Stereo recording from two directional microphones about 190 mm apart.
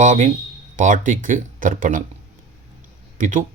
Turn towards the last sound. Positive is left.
turn(degrees=-40)  # may be behind; listen again after turning